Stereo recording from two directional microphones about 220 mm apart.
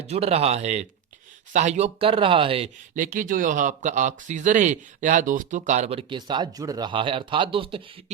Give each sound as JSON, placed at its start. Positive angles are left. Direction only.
{"t": 0.0, "sound": "speech", "side_deg": -30}
{"t": 2.9, "sound": "speech", "side_deg": -35}